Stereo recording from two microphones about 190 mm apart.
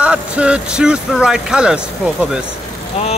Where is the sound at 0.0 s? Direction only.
5° right (ahead or behind).